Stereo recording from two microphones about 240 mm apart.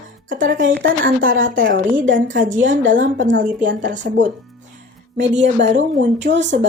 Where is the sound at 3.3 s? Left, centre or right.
Right.